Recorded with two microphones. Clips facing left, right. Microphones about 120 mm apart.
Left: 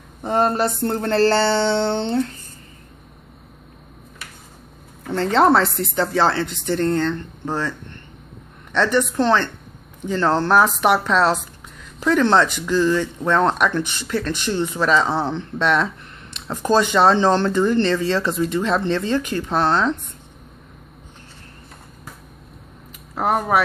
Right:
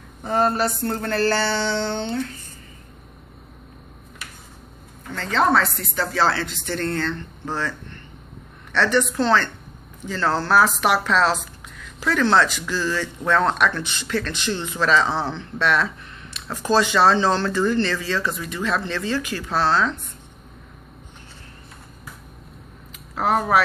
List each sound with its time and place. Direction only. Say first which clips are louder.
0.2 s speech: left 2 dB; 25° left (ahead or behind)
5.1 s speech: left 4 dB; 30° left (ahead or behind)
8.7 s a woman's voice: left 2 dB; 15° left (ahead or behind)